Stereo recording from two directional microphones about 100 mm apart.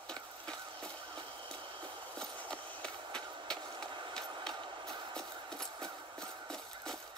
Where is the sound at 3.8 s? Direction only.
50° right (ahead or behind).